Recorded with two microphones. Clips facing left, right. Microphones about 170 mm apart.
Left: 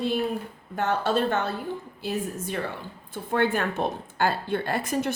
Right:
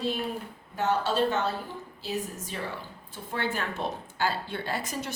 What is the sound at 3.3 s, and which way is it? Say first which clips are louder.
A woman's voice: left 7 dB; 55° left (ahead or behind).